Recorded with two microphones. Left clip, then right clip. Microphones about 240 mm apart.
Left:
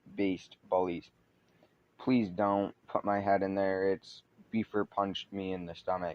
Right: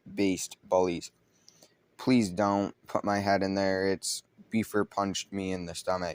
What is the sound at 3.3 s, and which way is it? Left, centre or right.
Speech, right.